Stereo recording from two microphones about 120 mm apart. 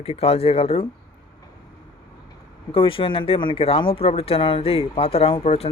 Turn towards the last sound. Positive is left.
turn(degrees=60)  # may be behind; listen again after turning